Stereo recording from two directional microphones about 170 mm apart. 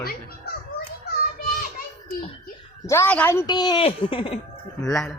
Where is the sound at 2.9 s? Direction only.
10° left (ahead or behind); by 4.3 s 30° left (ahead or behind).